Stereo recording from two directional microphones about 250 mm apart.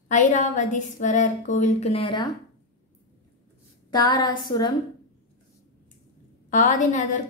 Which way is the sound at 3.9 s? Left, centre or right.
Centre.